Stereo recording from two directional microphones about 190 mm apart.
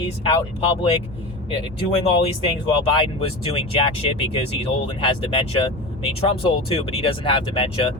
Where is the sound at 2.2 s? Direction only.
30° left (ahead or behind).